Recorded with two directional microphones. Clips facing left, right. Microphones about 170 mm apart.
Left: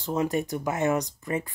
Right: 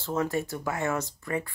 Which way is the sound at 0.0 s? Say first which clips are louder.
Left 2 dB; 15° left (ahead or behind).